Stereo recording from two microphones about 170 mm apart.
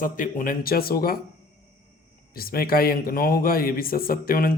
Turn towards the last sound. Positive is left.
turn(degrees=60)  # may be behind; listen again after turning